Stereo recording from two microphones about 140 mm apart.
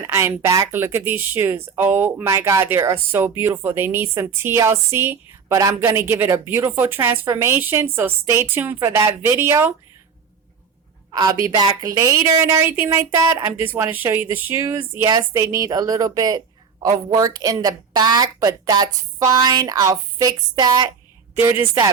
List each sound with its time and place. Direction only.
0.0 s speech: 20° right (ahead or behind)
11.1 s speech: 30° right (ahead or behind)
21.4 s speech: 20° right (ahead or behind)